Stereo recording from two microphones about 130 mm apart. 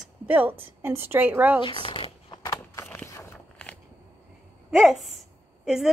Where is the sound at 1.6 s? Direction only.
40° left (ahead or behind).